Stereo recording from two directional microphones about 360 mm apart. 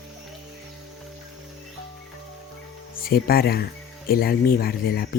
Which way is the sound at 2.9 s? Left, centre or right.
Left.